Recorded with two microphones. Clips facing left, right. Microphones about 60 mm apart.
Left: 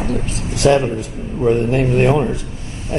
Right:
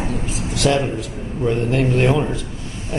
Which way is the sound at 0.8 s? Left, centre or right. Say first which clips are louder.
Left 2 dB; centre.